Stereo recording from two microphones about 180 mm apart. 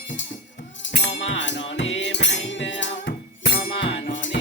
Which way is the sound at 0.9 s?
75° left (ahead or behind).